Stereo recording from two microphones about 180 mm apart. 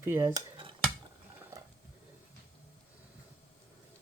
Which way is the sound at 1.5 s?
20° right (ahead or behind).